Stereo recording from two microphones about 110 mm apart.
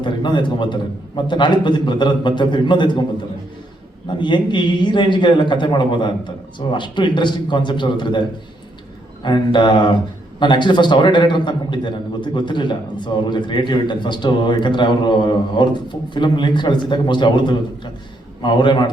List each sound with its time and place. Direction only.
0.0 s a man's voice: 45° left (ahead or behind)
4.2 s a man's voice: 45° left (ahead or behind)
9.2 s a man's voice: 45° left (ahead or behind)